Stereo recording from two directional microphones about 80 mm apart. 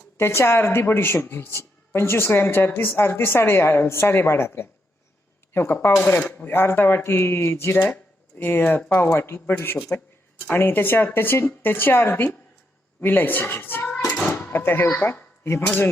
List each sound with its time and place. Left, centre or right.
0.2 s speech: left
6.0 s a child's voice: centre
14.1 s a sound: centre